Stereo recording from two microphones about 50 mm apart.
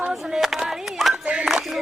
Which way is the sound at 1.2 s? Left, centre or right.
Centre.